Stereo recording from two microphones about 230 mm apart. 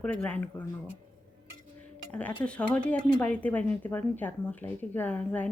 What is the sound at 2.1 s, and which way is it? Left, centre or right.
Speech, centre.